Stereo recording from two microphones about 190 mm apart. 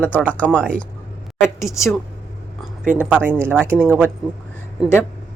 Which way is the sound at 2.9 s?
10° right (ahead or behind).